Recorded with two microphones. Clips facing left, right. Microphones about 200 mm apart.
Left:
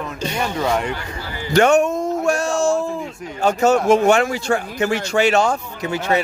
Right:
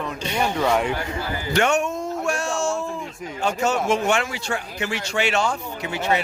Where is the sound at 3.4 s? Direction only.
45° left (ahead or behind).